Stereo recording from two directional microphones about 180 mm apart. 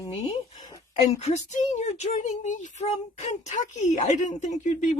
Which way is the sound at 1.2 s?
40° left (ahead or behind).